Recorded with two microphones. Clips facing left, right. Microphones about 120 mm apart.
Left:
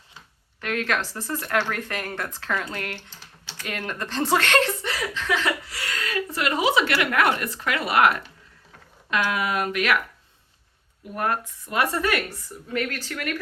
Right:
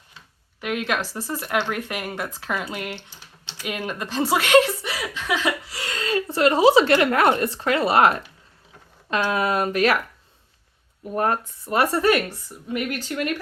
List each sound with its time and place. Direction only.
0.6 s speech: 15° right (ahead or behind); by 10.0 s 35° right (ahead or behind)
11.0 s speech: 35° right (ahead or behind)
12.1 s speech: 15° right (ahead or behind)